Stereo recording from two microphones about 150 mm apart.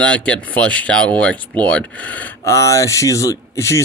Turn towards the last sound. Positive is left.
turn(degrees=20)  # may be behind; listen again after turning